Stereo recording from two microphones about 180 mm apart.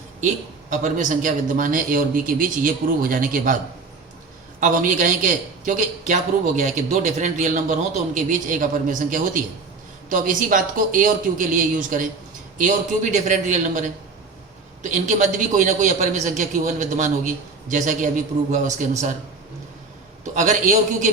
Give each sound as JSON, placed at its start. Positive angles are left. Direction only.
{"t": 0.7, "sound": "a man's voice", "side_deg": -45}
{"t": 4.6, "sound": "a man's voice", "side_deg": -45}
{"t": 20.3, "sound": "a man's voice", "side_deg": -45}